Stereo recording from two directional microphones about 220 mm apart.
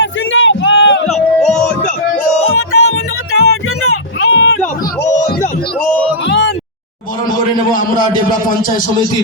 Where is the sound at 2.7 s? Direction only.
75° left (ahead or behind).